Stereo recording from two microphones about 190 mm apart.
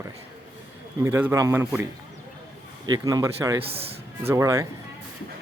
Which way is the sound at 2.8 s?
20° right (ahead or behind).